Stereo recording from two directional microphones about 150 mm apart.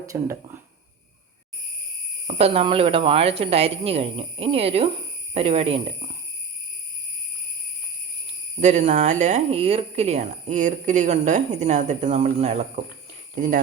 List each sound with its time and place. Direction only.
0.1 s speech: 20° right (ahead or behind)
2.2 s speech: 45° right (ahead or behind)
8.6 s speech: 50° right (ahead or behind)
13.3 s speech: 60° right (ahead or behind)